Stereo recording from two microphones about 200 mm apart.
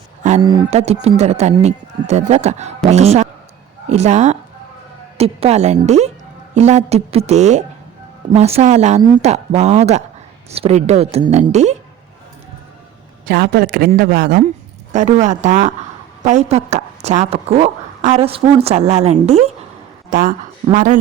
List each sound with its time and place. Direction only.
0.2 s a sound: 35° right (ahead or behind)
0.7 s a woman's voice: 35° right (ahead or behind)
13.2 s a woman's voice: 50° right (ahead or behind); by 19.5 s 30° right (ahead or behind)
20.1 s a woman's voice: 45° right (ahead or behind)